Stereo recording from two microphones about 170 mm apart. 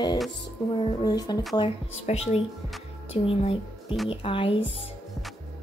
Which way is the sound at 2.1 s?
40° left (ahead or behind).